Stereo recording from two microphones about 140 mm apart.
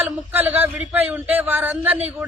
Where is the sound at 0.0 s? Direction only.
15° right (ahead or behind).